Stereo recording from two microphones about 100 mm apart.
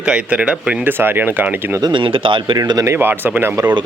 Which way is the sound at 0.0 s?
10° right (ahead or behind).